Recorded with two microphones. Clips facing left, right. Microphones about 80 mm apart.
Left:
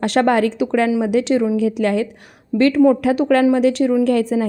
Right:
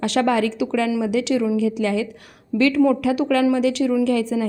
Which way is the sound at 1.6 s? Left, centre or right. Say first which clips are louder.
Left 3 dB; left.